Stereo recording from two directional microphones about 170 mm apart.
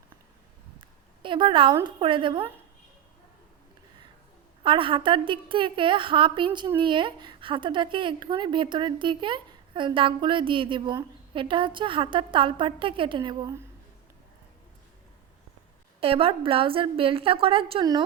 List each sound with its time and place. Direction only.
0.8 s a sound: 30° right (ahead or behind)
2.0 s a woman's voice: 30° right (ahead or behind)
4.6 s speech: 30° right (ahead or behind)
16.0 s a woman's voice: 35° right (ahead or behind)